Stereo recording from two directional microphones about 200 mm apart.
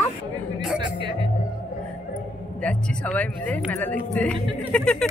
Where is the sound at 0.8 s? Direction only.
25° right (ahead or behind).